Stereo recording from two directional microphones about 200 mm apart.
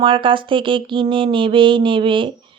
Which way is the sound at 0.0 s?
25° right (ahead or behind).